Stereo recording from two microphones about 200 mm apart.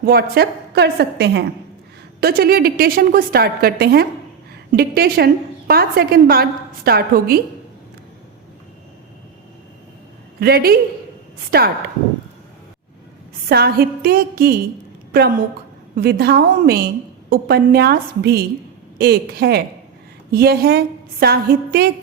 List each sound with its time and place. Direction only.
0.0 s a woman's voice: 50° right (ahead or behind)
10.4 s a woman's voice: 50° right (ahead or behind)
13.5 s a woman's voice: 50° right (ahead or behind)